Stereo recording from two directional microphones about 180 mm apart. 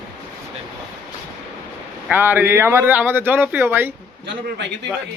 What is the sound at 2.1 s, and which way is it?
Speech, 10° right (ahead or behind).